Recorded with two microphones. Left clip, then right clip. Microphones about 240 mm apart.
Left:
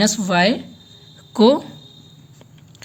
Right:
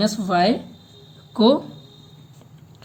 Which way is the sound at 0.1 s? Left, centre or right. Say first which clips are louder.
Left 2 dB; left.